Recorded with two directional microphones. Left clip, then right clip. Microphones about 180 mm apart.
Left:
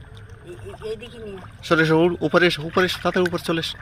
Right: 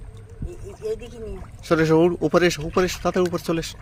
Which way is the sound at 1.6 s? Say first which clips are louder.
Even; 5° right (ahead or behind).